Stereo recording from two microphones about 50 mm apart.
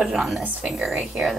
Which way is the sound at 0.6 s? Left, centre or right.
Centre.